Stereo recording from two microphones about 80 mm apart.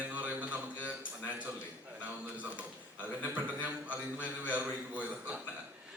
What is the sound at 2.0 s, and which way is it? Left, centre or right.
A man's voice, centre.